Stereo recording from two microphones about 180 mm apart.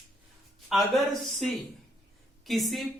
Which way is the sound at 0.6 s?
Centre (ahead or behind).